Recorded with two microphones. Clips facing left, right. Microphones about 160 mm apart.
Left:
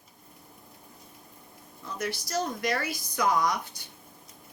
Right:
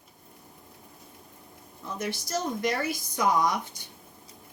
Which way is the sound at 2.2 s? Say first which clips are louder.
Right 1 dB; 20° right (ahead or behind).